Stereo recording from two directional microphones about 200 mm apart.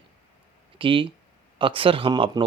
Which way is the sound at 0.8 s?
25° right (ahead or behind).